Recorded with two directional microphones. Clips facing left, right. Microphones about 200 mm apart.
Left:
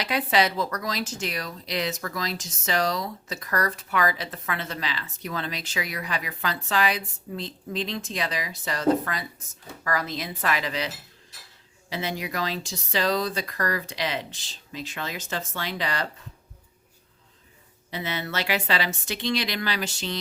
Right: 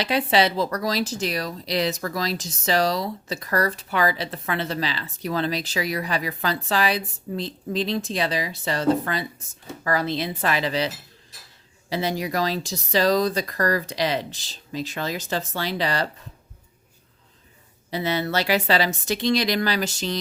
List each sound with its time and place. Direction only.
0.0 s speech: 30° right (ahead or behind)
17.9 s speech: 35° right (ahead or behind)